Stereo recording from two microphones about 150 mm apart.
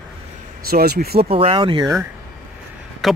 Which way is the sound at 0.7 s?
85° right.